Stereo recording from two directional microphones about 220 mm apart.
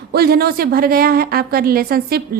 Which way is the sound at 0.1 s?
45° right (ahead or behind).